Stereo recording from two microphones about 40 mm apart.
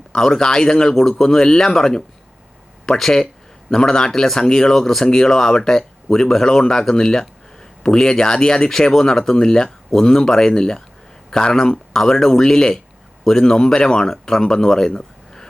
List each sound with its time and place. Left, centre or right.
0.1 s speech: centre